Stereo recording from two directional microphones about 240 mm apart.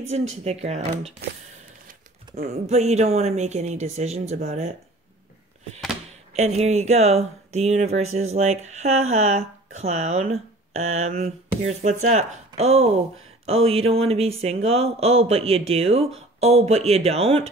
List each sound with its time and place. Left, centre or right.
0.3 s speech: right
2.3 s speech: right
6.3 s speech: right